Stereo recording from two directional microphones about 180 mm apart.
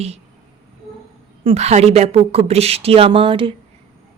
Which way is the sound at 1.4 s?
35° right (ahead or behind).